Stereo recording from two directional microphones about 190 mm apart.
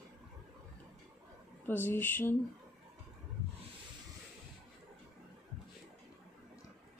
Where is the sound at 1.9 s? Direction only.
10° left (ahead or behind).